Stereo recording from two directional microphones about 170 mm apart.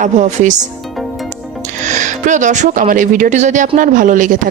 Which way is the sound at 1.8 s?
45° right (ahead or behind).